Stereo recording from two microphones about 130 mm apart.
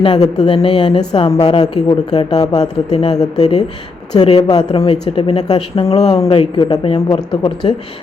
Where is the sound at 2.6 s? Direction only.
55° left (ahead or behind).